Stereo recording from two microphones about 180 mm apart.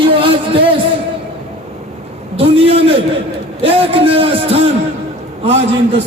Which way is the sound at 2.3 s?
30° right (ahead or behind).